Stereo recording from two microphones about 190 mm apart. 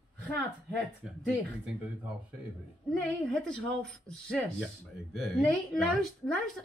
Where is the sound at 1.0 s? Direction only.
5° right (ahead or behind).